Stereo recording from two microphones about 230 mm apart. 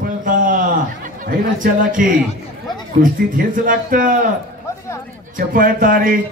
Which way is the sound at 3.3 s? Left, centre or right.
Right.